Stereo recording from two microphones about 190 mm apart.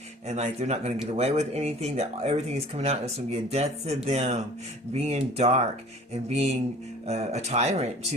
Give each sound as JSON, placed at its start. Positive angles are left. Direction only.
{"t": 0.3, "sound": "speech", "side_deg": -35}